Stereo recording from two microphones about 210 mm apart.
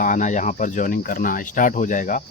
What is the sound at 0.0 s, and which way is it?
Speech, 35° left (ahead or behind).